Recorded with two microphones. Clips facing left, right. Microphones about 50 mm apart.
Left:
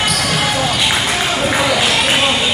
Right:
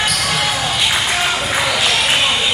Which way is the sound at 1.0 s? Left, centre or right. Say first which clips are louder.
Left 1 dB; centre.